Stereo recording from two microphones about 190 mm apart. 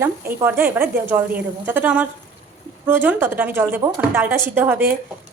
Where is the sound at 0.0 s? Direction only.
10° right (ahead or behind).